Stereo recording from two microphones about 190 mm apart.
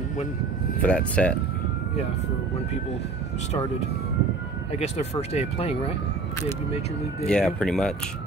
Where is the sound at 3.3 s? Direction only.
35° left (ahead or behind).